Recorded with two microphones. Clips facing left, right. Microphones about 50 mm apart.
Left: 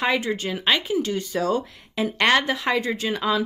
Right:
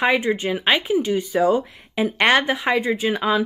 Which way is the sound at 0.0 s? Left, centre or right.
Centre.